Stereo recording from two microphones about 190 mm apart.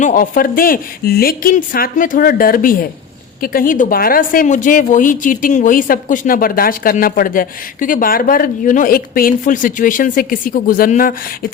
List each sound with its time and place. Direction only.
0.0 s speech: 45° left (ahead or behind)